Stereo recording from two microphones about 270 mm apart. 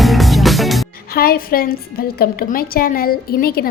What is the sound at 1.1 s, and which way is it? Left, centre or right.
A woman's voice, left.